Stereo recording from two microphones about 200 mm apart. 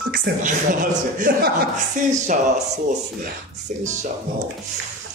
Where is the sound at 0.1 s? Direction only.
45° right (ahead or behind).